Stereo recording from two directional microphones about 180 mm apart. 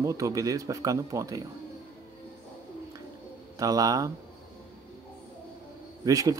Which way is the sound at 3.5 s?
20° right (ahead or behind).